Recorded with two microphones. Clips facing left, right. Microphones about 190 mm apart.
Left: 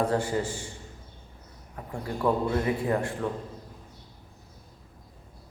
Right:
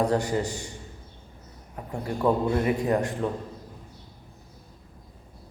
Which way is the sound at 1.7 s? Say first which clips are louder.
Right 3 dB; 20° right (ahead or behind).